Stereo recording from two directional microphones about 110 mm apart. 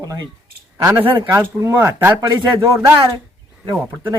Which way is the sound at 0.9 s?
15° right (ahead or behind).